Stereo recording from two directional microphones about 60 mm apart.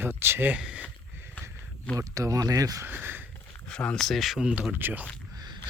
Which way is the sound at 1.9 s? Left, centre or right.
Right.